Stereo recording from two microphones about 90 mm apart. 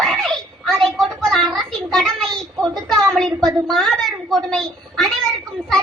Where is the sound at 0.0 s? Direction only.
Centre (ahead or behind).